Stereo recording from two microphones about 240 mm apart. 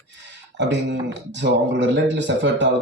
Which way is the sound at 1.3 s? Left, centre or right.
Right.